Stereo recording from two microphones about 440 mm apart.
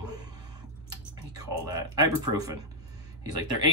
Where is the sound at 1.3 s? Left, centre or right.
Centre.